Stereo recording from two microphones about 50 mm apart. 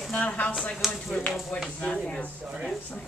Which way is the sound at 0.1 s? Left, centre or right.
Left.